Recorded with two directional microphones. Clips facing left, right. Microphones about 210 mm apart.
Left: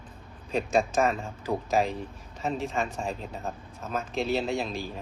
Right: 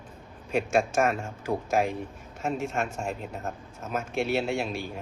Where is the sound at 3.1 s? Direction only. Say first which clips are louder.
Right 1 dB; 5° right (ahead or behind).